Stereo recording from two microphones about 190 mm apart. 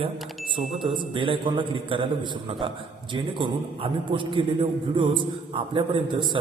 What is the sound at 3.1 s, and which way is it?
A man's voice, 25° right (ahead or behind).